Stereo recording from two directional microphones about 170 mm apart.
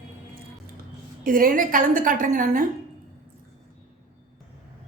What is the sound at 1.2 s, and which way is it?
A woman's voice, 55° right (ahead or behind).